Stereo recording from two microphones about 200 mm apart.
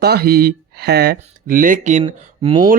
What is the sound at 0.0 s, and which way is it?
Speech, 50° right (ahead or behind).